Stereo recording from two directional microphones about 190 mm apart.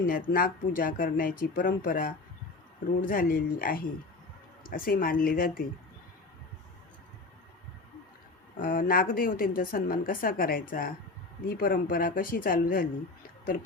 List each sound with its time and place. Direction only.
0.0 s a woman's voice: 45° left (ahead or behind)
8.5 s a woman's voice: 45° left (ahead or behind)